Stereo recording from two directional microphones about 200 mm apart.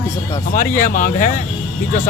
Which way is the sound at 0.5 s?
40° left (ahead or behind).